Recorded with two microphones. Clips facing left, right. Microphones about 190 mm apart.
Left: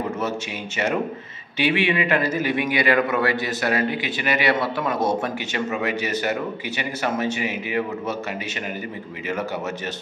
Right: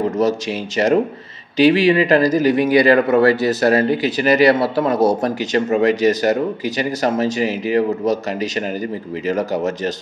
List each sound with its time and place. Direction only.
0.2 s a man's voice: 35° right (ahead or behind)